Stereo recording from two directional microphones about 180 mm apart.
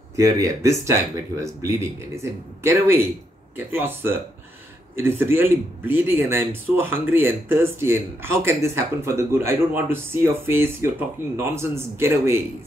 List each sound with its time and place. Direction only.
0.1 s speech: 15° right (ahead or behind)